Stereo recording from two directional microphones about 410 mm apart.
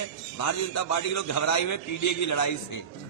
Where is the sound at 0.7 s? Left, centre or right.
Left.